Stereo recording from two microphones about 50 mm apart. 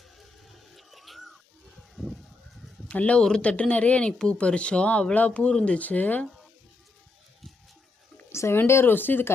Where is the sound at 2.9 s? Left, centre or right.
Left.